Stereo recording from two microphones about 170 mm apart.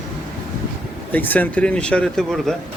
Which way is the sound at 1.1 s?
10° left (ahead or behind).